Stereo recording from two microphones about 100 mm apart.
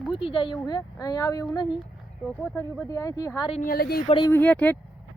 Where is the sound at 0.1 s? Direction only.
60° left (ahead or behind).